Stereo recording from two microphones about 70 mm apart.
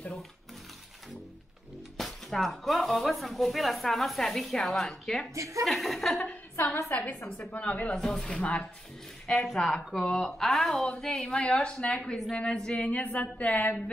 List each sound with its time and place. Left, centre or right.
2.0 s speech: centre
5.3 s a woman's voice: right
5.7 s speech: centre
6.5 s a woman's voice: left
9.5 s speech: centre; by 13.8 s left